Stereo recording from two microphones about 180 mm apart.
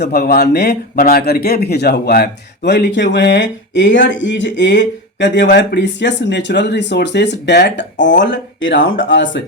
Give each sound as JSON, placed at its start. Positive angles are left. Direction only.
{"t": 0.0, "sound": "a man's voice", "side_deg": 60}